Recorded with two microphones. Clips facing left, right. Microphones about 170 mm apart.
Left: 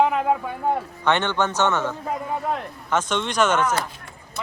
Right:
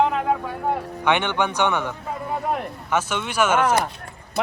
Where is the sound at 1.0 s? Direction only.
10° right (ahead or behind).